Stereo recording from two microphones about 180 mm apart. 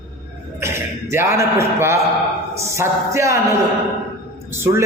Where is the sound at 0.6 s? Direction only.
15° right (ahead or behind).